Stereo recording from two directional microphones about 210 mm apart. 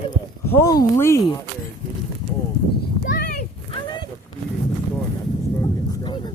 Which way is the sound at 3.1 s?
45° left (ahead or behind).